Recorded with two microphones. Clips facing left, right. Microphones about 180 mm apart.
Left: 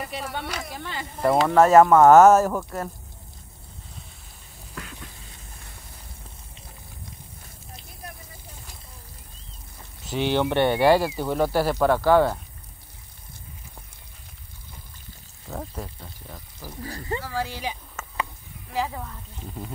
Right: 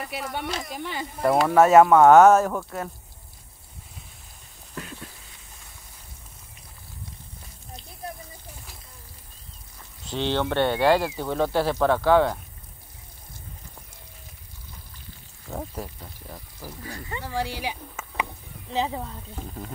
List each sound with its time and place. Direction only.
0.1 s speech: 10° right (ahead or behind)
1.2 s speech: 5° right (ahead or behind)
10.0 s speech: 10° left (ahead or behind)
15.5 s speech: 5° right (ahead or behind)
16.8 s speech: 35° left (ahead or behind)
17.2 s speech: 15° right (ahead or behind)
18.7 s speech: 20° right (ahead or behind)